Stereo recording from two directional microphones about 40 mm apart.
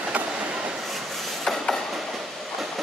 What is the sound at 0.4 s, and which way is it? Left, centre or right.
Train, right.